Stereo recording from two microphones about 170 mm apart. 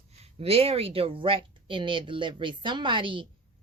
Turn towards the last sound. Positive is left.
turn(degrees=-30)  # may be behind; listen again after turning